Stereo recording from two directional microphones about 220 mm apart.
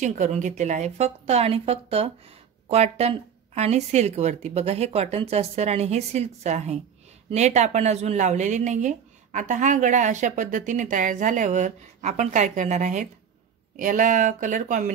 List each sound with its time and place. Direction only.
0.0 s a woman's voice: 35° right (ahead or behind)